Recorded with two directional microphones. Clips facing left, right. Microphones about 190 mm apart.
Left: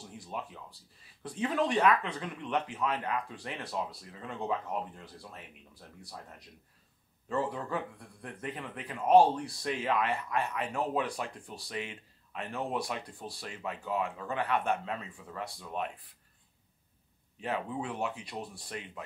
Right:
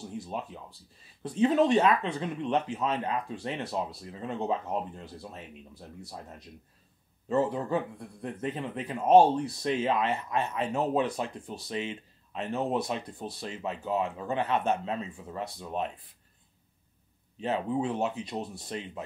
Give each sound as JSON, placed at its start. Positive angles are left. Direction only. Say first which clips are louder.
{"t": 0.2, "sound": "speech", "louder": "right 4 dB", "side_deg": -25}
{"t": 7.2, "sound": "speech", "louder": "right 6 dB", "side_deg": -25}
{"t": 17.4, "sound": "speech", "louder": "right 6 dB", "side_deg": -25}